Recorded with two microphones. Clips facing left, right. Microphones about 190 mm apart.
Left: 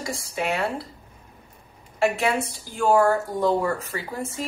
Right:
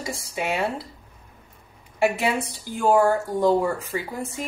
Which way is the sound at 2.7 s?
15° right (ahead or behind).